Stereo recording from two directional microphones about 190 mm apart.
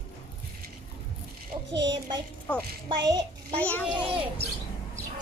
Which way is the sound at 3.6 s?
5° left (ahead or behind).